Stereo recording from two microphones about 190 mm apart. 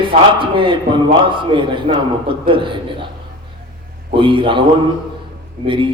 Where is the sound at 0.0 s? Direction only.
25° right (ahead or behind).